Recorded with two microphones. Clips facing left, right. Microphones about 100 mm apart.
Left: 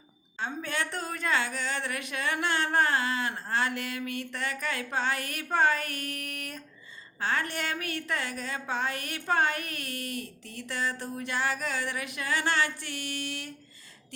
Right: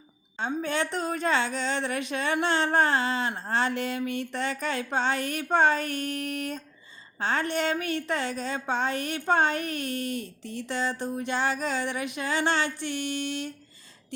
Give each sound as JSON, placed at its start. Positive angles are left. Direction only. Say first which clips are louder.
{"t": 0.3, "sound": "a woman's voice", "louder": "right 5 dB", "side_deg": -20}